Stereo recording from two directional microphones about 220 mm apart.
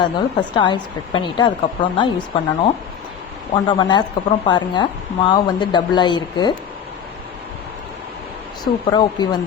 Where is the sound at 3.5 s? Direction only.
20° left (ahead or behind).